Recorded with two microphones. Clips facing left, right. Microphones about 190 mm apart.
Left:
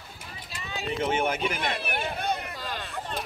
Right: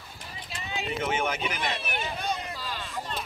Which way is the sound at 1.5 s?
55° left (ahead or behind).